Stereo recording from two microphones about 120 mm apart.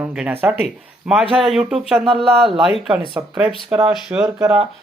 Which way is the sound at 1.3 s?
5° right (ahead or behind).